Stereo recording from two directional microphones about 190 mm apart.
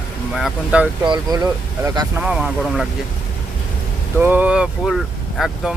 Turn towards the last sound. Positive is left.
turn(degrees=0)  # may be behind; listen again after turning